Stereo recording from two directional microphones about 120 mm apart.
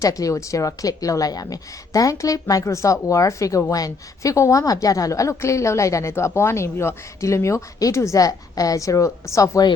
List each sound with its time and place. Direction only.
0.0 s a woman's voice: 30° left (ahead or behind)